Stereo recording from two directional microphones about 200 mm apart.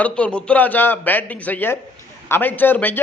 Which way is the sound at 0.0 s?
5° left (ahead or behind).